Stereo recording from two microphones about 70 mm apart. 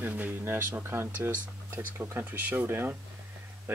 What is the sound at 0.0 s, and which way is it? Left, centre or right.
Speech, right.